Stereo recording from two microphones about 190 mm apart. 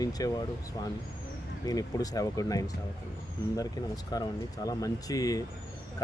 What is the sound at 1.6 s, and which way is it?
Speech, 20° left (ahead or behind).